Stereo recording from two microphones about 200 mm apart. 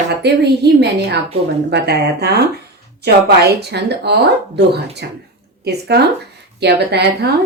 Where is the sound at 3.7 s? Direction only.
55° right (ahead or behind).